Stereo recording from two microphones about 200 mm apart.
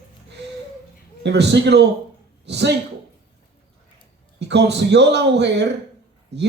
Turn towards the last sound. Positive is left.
turn(degrees=-60)  # may be behind; listen again after turning